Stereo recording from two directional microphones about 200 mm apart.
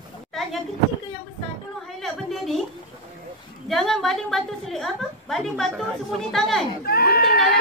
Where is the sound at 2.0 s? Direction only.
Centre (ahead or behind).